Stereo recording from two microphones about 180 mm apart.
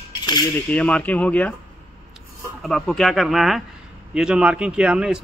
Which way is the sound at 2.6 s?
Centre (ahead or behind).